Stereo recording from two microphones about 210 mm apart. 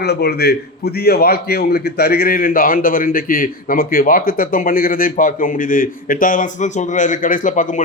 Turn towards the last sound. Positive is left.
turn(degrees=35)  # may be behind; listen again after turning